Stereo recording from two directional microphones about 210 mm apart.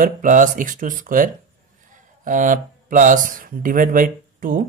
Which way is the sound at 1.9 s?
40° right (ahead or behind).